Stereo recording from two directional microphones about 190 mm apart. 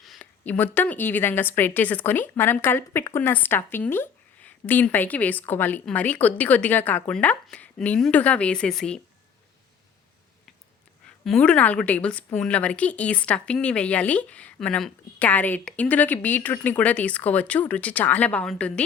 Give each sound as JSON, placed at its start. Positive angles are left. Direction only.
{"t": 0.0, "sound": "a woman's voice", "side_deg": 5}
{"t": 11.0, "sound": "a woman's voice", "side_deg": 5}